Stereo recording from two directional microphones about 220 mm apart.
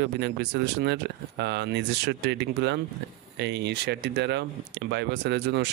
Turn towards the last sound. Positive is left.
turn(degrees=-50)  # may be behind; listen again after turning